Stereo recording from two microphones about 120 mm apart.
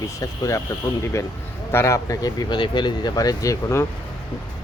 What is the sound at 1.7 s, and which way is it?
Speech, 25° left (ahead or behind).